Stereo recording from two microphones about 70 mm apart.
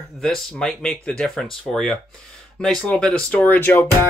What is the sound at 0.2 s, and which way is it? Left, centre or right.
Speech, centre.